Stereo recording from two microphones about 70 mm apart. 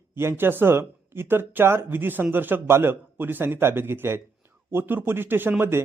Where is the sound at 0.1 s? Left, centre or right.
Right.